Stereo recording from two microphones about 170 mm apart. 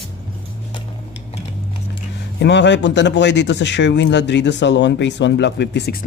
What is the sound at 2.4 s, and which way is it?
Speech, 90° left.